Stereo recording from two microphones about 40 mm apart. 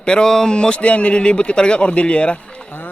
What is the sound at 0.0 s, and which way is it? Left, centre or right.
A man's voice, left.